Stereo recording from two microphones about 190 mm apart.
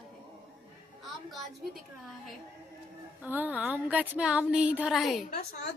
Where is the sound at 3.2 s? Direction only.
10° right (ahead or behind).